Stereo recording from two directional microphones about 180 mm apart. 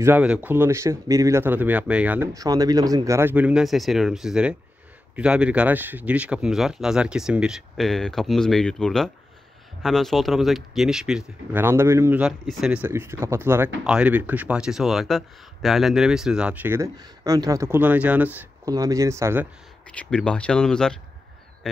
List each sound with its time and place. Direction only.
0.0 s speech: 10° right (ahead or behind)
2.3 s speech: 20° right (ahead or behind)
18.7 s speech: 20° right (ahead or behind)
19.9 s speech: 5° left (ahead or behind)